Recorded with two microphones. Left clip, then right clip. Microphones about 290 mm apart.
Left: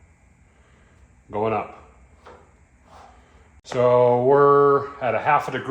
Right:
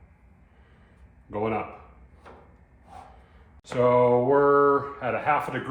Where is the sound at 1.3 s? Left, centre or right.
Left.